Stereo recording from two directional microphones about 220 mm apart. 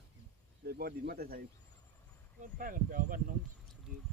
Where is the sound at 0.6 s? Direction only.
45° right (ahead or behind).